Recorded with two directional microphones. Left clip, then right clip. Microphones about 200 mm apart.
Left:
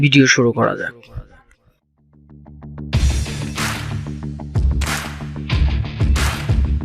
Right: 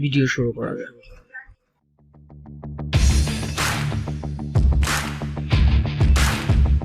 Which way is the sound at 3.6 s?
Centre (ahead or behind).